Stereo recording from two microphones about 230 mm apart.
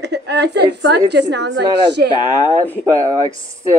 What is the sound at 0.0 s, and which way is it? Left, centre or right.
A woman's voice, right.